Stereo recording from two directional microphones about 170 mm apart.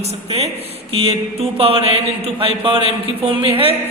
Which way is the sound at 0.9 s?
35° right (ahead or behind).